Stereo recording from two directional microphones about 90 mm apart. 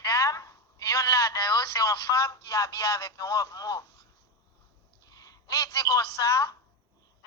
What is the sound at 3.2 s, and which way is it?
Speech, 40° left (ahead or behind).